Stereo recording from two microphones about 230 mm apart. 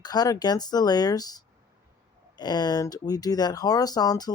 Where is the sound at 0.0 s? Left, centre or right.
Centre.